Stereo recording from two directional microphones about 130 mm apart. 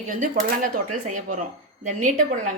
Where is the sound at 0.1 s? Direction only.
85° right.